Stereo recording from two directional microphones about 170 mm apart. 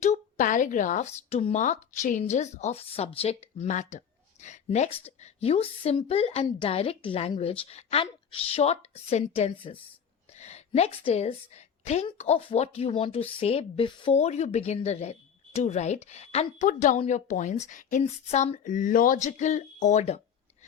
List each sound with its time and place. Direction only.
0.0 s a woman's voice: 45° left (ahead or behind)